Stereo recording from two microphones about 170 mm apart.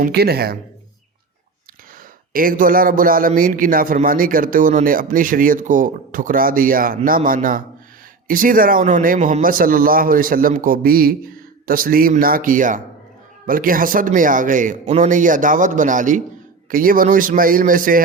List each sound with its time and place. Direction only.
0.0 s speech: 70° right (ahead or behind)
2.3 s a man's voice: 55° right (ahead or behind)